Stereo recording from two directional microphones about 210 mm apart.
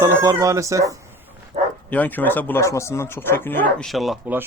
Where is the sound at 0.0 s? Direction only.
15° right (ahead or behind).